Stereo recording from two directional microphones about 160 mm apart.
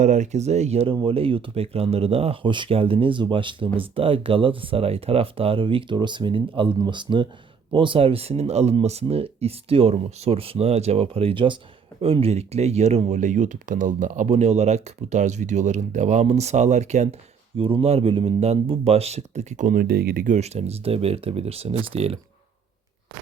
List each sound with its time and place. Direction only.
0.0 s speech: 50° right (ahead or behind)
17.6 s speech: 35° right (ahead or behind); by 20.3 s 70° right (ahead or behind)
20.3 s speech: 45° right (ahead or behind)